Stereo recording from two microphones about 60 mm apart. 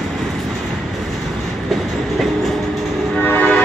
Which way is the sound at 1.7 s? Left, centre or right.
Centre.